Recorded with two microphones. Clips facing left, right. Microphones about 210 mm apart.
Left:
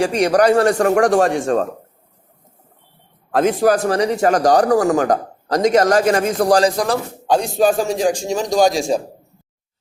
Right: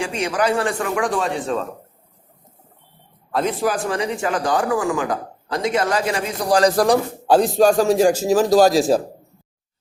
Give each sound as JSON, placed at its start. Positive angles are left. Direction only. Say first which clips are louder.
{"t": 0.0, "sound": "speech", "louder": "left 7 dB", "side_deg": 40}
{"t": 3.6, "sound": "speech", "louder": "left 6 dB", "side_deg": 40}
{"t": 6.8, "sound": "a man's voice", "louder": "right 3 dB", "side_deg": -10}